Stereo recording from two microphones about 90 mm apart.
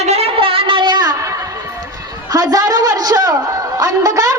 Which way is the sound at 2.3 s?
45° right (ahead or behind).